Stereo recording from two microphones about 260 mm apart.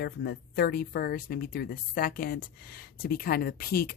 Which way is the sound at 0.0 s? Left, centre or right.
Left.